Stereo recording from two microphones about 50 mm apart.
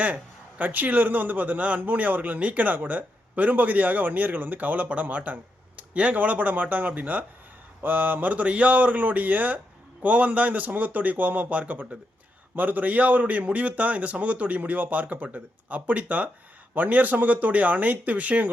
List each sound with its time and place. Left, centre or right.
0.6 s speech: right